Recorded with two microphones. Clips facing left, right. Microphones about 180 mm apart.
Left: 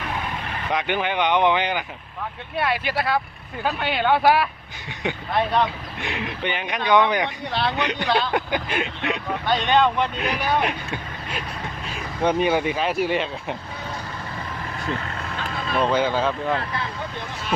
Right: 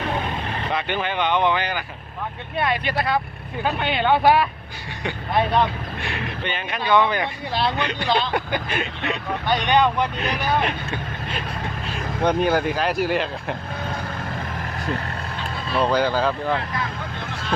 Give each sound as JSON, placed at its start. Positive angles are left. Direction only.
{"t": 0.7, "sound": "speech", "side_deg": 15}
{"t": 2.6, "sound": "speech", "side_deg": 5}
{"t": 6.0, "sound": "speech", "side_deg": 15}
{"t": 8.0, "sound": "speech", "side_deg": 5}
{"t": 8.3, "sound": "speech", "side_deg": 15}
{"t": 9.5, "sound": "speech", "side_deg": -10}
{"t": 10.2, "sound": "speech", "side_deg": 10}
{"t": 12.2, "sound": "speech", "side_deg": 0}
{"t": 15.8, "sound": "speech", "side_deg": 0}